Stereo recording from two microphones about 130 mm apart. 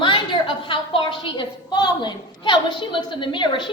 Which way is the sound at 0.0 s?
40° left (ahead or behind).